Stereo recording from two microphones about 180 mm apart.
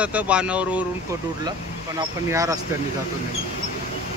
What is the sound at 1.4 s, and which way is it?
Speech, 20° right (ahead or behind).